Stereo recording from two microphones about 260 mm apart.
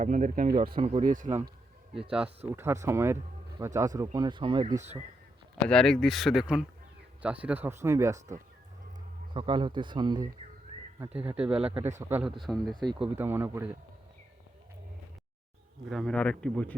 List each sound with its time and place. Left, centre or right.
0.0 s speech: right
2.0 s speech: centre; by 4.9 s right
5.6 s speech: centre
11.0 s speech: centre
12.8 s speech: centre
15.9 s speech: centre